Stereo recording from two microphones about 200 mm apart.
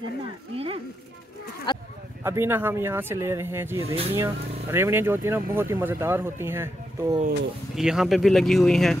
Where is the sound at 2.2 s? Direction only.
10° right (ahead or behind).